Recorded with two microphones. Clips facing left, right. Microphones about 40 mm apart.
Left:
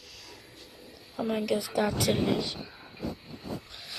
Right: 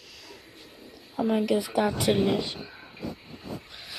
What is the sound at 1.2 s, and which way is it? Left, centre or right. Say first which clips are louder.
A woman's voice: right 4 dB; centre.